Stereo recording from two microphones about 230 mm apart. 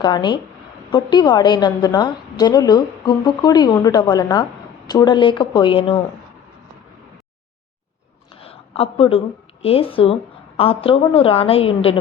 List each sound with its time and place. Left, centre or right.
0.0 s a woman's voice: centre
8.3 s a woman's voice: left